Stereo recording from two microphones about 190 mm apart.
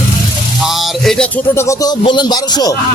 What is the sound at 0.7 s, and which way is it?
Music, centre (ahead or behind).